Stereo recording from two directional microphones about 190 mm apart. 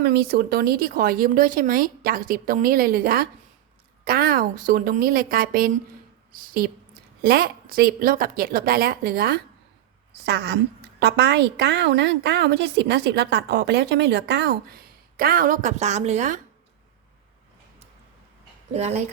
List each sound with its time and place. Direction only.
0.0 s a woman's voice: 55° right (ahead or behind); by 16.4 s 40° right (ahead or behind)
18.7 s speech: 35° right (ahead or behind)